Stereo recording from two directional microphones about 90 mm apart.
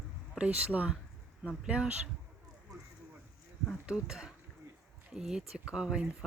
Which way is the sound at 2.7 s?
40° right (ahead or behind).